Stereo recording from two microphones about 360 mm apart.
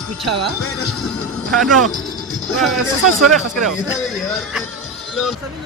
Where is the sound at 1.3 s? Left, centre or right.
Centre.